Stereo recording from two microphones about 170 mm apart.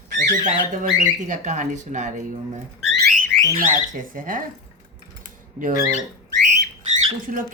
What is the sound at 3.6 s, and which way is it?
Speech, 50° right (ahead or behind).